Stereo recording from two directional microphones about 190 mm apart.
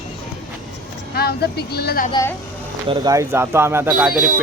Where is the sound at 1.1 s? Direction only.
55° left (ahead or behind).